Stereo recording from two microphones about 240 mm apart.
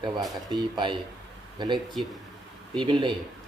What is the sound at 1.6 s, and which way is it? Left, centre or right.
Speech, centre.